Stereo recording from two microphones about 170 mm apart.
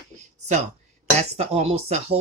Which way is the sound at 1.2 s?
40° right (ahead or behind).